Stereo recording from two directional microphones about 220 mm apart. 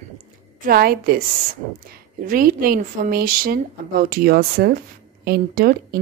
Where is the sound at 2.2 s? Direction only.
40° right (ahead or behind).